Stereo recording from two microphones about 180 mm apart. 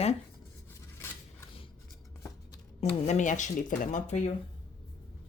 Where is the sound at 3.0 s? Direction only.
45° left (ahead or behind).